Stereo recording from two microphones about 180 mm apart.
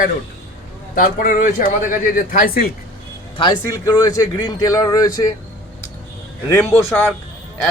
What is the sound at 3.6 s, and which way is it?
Speech, 20° left (ahead or behind).